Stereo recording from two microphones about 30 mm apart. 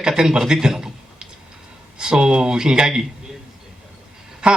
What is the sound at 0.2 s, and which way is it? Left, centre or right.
A man's voice, right.